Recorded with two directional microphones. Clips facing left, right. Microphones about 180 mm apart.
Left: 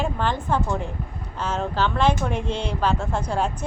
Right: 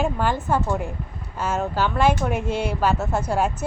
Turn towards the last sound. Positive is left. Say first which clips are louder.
# right 2 dB
turn(degrees=-10)  # may be behind; listen again after turning